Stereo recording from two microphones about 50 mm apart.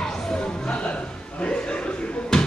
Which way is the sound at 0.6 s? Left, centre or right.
Left.